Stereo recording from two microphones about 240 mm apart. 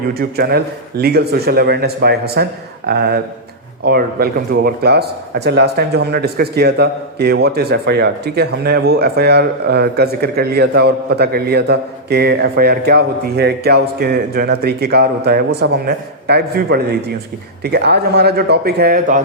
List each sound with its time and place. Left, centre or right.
0.1 s a man's voice: right